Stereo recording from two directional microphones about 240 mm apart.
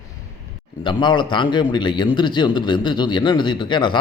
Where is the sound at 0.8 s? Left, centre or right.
Centre.